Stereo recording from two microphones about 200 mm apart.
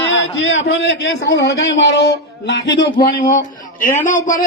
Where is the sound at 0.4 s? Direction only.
65° left (ahead or behind).